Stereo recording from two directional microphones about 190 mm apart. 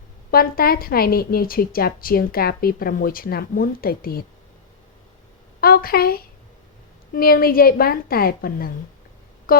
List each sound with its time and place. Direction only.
0.3 s a woman's voice: 50° left (ahead or behind)
5.5 s a woman's voice: 50° left (ahead or behind)